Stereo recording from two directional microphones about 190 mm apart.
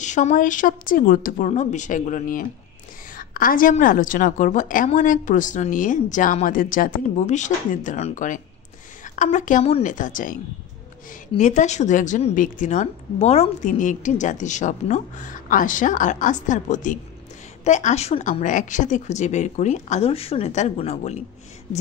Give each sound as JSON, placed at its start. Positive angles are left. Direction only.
{"t": 0.0, "sound": "a woman's voice", "side_deg": 40}